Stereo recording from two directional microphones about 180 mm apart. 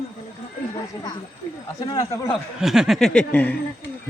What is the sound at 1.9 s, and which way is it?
Speech, 15° left (ahead or behind).